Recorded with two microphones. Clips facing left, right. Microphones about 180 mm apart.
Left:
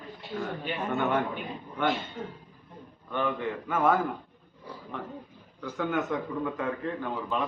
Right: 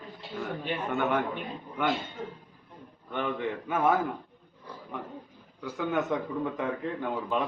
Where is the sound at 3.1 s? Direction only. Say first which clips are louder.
Left 1 dB; 20° right (ahead or behind).